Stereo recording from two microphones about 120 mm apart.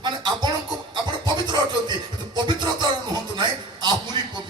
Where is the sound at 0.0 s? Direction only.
35° right (ahead or behind).